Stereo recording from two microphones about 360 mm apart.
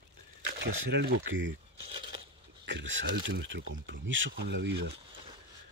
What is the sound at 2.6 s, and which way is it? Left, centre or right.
Speech, right.